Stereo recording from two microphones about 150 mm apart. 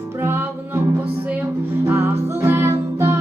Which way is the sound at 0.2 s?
15° right (ahead or behind).